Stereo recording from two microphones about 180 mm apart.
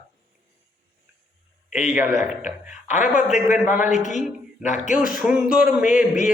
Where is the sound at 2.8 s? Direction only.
45° left (ahead or behind).